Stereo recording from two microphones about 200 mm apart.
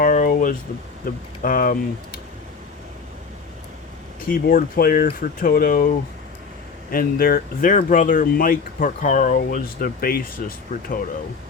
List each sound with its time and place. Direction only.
0.0 s a sound: 45° left (ahead or behind)
1.0 s speech: 45° left (ahead or behind)
4.3 s speech: 45° left (ahead or behind)
6.9 s speech: 45° left (ahead or behind)